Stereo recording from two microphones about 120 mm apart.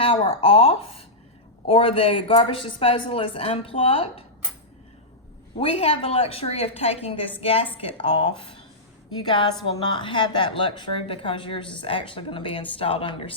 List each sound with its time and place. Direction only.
0.0 s speech: 50° left (ahead or behind)
5.5 s speech: 55° left (ahead or behind)